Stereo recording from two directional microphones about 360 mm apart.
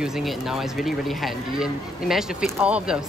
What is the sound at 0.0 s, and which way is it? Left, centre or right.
Speech, centre.